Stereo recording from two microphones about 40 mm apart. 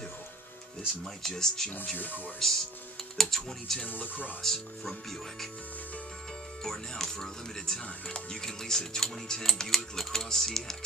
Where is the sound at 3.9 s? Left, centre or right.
Left.